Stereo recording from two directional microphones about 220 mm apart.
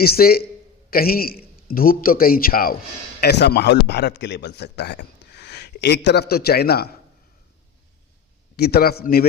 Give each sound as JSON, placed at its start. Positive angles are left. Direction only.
{"t": 0.0, "sound": "a man's voice", "side_deg": 45}
{"t": 8.5, "sound": "a man's voice", "side_deg": 45}